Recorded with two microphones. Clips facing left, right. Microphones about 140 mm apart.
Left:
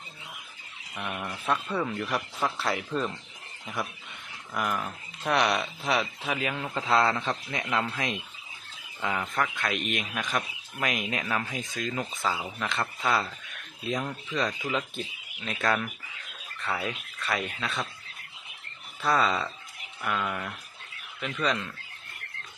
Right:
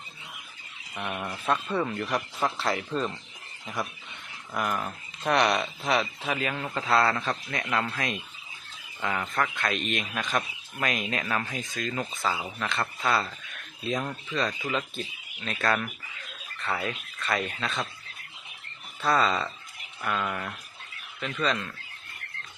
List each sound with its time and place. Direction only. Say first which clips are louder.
0.9 s a man's voice: right 1 dB; 10° right (ahead or behind); by 8.2 s 20° left (ahead or behind)
9.0 s a man's voice: even; 5° left (ahead or behind)
14.7 s speech: even; 10° left (ahead or behind)
19.0 s a man's voice: right 1 dB; 10° left (ahead or behind)
21.4 s speech: even; 10° left (ahead or behind)